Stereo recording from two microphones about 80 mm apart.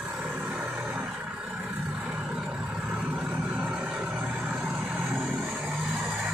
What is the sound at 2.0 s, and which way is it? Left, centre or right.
Vehicle, centre.